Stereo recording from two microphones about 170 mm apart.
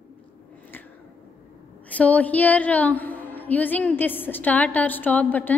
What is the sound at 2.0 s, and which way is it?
A woman's voice, 10° left (ahead or behind).